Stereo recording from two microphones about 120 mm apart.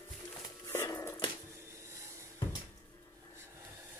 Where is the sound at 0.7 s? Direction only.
25° left (ahead or behind).